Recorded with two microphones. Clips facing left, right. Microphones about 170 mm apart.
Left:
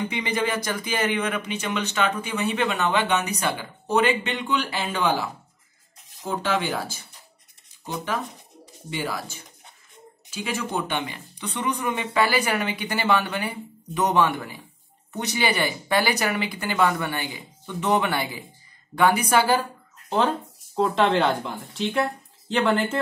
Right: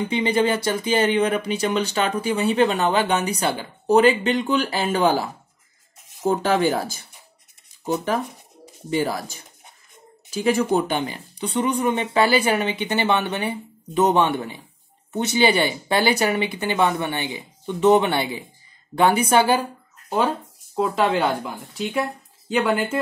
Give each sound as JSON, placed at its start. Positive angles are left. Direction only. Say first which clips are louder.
{"t": 0.1, "sound": "speech", "louder": "right 6 dB", "side_deg": -30}
{"t": 10.3, "sound": "speech", "louder": "right 9 dB", "side_deg": -40}
{"t": 20.7, "sound": "speech", "louder": "even", "side_deg": -5}